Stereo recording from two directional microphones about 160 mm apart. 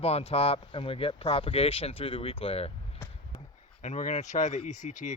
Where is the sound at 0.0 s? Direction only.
40° left (ahead or behind).